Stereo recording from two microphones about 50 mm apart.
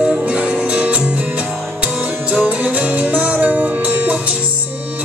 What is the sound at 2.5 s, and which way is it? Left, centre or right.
Music, right.